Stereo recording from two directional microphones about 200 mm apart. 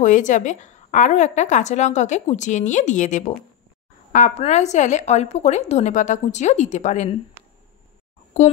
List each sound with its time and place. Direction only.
0.0 s a woman's voice: 40° left (ahead or behind)